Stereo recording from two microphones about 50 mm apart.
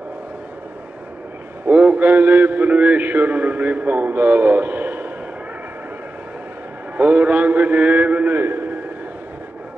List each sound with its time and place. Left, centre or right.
1.7 s a man's voice: right
7.0 s a man's voice: right
8.4 s a sound: right